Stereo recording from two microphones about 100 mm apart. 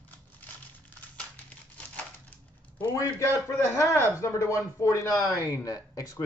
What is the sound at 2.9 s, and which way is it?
A man's voice, 30° left (ahead or behind).